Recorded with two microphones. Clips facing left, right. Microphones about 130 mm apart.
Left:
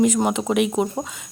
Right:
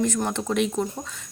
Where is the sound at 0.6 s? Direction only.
75° left (ahead or behind).